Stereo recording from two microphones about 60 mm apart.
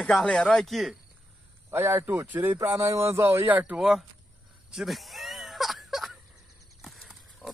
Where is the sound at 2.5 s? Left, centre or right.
Right.